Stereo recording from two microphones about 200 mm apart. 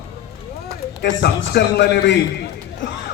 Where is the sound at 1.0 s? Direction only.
55° left (ahead or behind).